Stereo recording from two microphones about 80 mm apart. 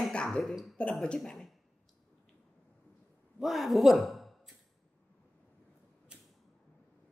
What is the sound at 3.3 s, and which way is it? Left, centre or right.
A man's voice, centre.